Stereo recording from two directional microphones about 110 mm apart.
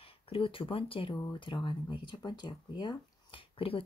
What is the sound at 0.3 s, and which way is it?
Speech, 55° left (ahead or behind).